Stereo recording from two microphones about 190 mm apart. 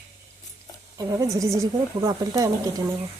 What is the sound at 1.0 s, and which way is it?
A woman's voice, 20° right (ahead or behind).